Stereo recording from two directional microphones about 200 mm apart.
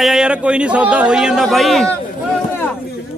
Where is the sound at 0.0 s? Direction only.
5° right (ahead or behind).